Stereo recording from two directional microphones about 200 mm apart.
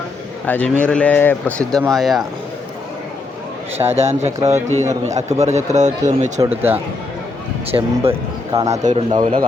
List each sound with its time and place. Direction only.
0.4 s speech: 10° left (ahead or behind)
3.8 s speech: 20° right (ahead or behind)
4.8 s a man's voice: 35° right (ahead or behind)
6.4 s speech: 10° right (ahead or behind)
7.7 s speech: 30° right (ahead or behind)
8.5 s speech: 15° right (ahead or behind)
8.8 s speech: 30° right (ahead or behind)
9.2 s a man's voice: 40° right (ahead or behind)